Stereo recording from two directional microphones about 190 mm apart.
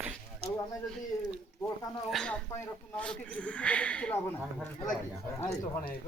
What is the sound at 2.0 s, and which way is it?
Speech, 5° left (ahead or behind).